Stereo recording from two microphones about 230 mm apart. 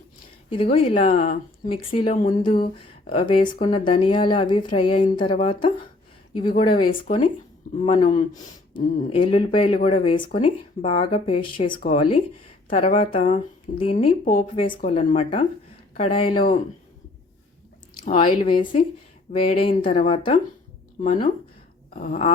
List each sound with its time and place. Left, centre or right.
0.5 s a woman's voice: left
18.0 s a woman's voice: left
21.0 s speech: left
21.8 s a sound: left